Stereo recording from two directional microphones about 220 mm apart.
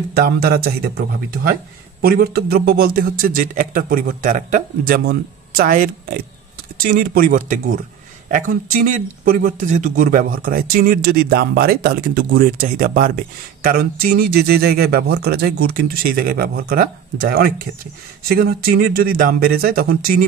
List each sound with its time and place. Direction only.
0.1 s speech: 45° right (ahead or behind)